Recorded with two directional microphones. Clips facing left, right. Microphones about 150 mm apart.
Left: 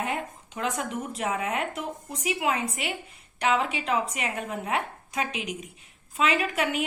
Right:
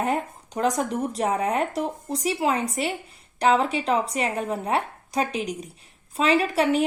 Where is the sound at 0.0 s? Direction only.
40° right (ahead or behind).